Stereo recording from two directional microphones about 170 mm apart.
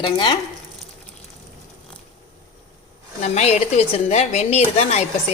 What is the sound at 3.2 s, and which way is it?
A woman's voice, 40° left (ahead or behind).